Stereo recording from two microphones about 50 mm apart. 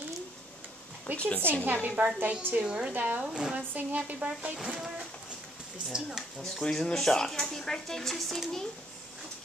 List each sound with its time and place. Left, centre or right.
1.1 s a woman's voice: left
1.8 s a woman's voice: right
2.6 s speech: centre
2.9 s a woman's voice: right
3.3 s speech: centre
3.7 s speech: right
4.7 s speech: centre
6.4 s speech: centre